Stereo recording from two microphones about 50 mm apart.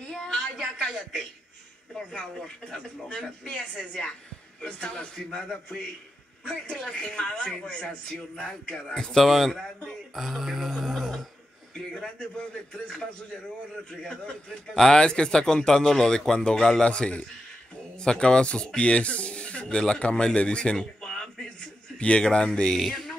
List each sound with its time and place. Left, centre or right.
0.0 s a sound: centre
2.0 s a man's voice: centre
13.8 s a man's voice: centre
22.8 s music: centre